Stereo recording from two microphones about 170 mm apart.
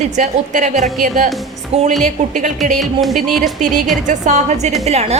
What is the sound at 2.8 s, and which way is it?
Music, centre (ahead or behind).